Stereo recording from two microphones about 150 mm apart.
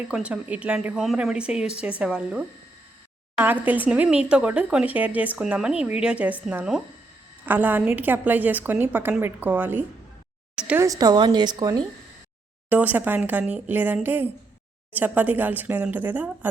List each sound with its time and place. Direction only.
0.1 s a woman's voice: 5° right (ahead or behind)
10.8 s a woman's voice: 20° right (ahead or behind)
12.6 s a woman's voice: 10° right (ahead or behind)